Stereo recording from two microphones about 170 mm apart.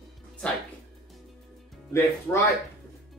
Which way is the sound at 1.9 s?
15° left (ahead or behind).